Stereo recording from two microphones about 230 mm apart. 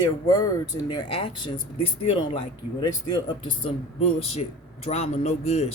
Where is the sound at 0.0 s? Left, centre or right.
Centre.